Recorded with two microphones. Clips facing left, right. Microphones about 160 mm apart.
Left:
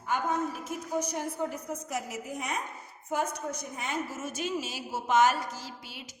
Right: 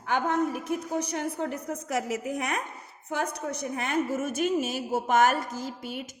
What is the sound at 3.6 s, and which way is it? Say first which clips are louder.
A woman's voice: right 6 dB; 65° right (ahead or behind).